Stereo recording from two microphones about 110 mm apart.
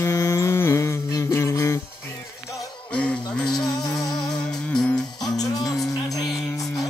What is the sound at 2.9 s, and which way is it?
Music, 10° left (ahead or behind).